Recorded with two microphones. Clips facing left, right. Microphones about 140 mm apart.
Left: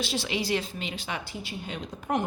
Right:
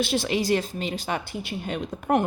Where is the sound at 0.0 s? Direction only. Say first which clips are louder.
Right 6 dB; 55° right (ahead or behind).